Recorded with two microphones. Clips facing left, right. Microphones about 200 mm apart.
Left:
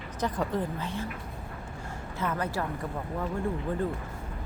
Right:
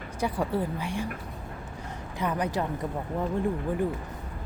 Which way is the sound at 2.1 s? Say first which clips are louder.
Right 3 dB; 15° right (ahead or behind).